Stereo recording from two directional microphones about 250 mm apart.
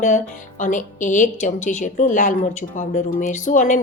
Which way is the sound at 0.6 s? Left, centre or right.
Left.